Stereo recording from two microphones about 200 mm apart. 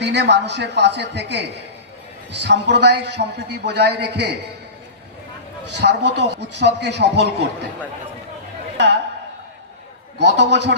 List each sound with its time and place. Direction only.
0.0 s a man's voice: 60° right (ahead or behind)
5.7 s a man's voice: 60° right (ahead or behind)
10.2 s a man's voice: 60° right (ahead or behind)